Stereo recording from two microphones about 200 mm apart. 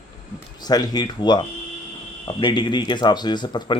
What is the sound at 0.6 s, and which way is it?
Speech, 20° left (ahead or behind).